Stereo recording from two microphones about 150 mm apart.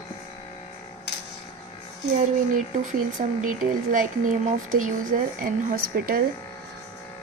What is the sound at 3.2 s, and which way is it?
Speech, 65° right (ahead or behind).